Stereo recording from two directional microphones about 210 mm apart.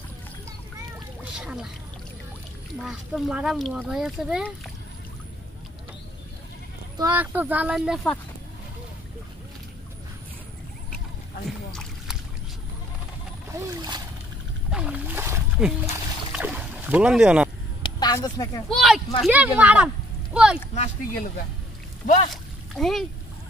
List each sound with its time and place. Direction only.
0.5 s a sound: 15° right (ahead or behind)
1.3 s a sound: 5° right (ahead or behind)
2.8 s speech: 5° right (ahead or behind)
7.0 s speech: 10° right (ahead or behind)
11.4 s boat: centre (ahead or behind)
13.5 s splash: 15° right (ahead or behind)
14.7 s wild animals: 5° right (ahead or behind)
16.3 s boat: 5° right (ahead or behind)
17.8 s a sound: 20° left (ahead or behind)
18.7 s speech: centre (ahead or behind)
20.7 s speech: 35° left (ahead or behind)
22.3 s splash: centre (ahead or behind)